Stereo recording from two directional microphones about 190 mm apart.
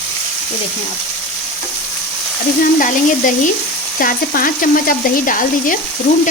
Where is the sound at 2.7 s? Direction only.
45° left (ahead or behind).